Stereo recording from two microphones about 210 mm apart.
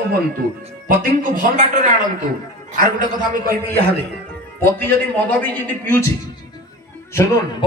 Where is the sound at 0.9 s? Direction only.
40° right (ahead or behind).